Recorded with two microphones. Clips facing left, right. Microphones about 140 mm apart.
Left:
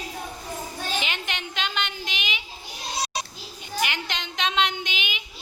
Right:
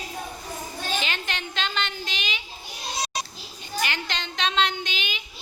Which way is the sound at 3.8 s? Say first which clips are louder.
Even; 15° left (ahead or behind).